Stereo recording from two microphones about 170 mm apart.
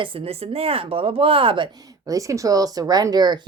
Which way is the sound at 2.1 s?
20° right (ahead or behind).